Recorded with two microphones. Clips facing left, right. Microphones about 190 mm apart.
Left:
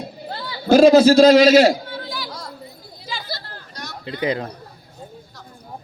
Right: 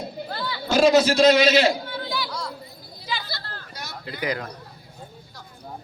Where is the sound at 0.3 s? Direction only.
30° left (ahead or behind).